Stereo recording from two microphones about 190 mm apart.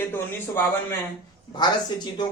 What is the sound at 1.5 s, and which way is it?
Speech, 20° left (ahead or behind).